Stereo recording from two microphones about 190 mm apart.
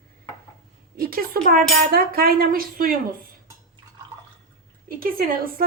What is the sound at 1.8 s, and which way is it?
A woman's voice, 50° right (ahead or behind).